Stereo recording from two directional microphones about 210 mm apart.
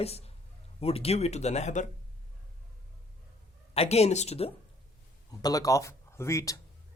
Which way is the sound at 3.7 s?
30° left (ahead or behind).